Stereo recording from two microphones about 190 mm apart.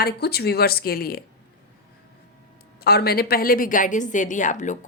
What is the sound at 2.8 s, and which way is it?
A woman's voice, 55° left (ahead or behind).